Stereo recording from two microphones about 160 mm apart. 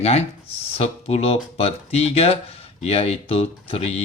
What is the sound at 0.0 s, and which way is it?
Speech, 40° left (ahead or behind).